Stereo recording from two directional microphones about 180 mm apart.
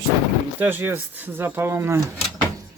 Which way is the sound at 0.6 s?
10° right (ahead or behind).